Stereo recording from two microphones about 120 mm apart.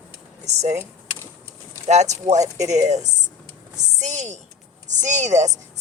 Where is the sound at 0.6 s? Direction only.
70° right (ahead or behind).